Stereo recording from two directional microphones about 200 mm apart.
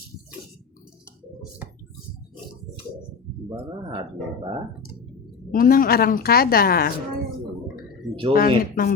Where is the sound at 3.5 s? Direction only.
20° right (ahead or behind).